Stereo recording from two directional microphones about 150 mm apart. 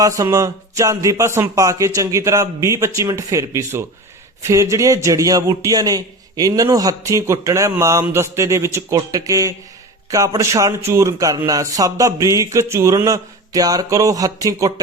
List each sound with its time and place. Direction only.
0.0 s a man's voice: 20° right (ahead or behind)